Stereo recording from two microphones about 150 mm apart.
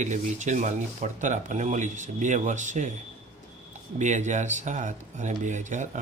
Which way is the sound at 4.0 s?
55° right (ahead or behind).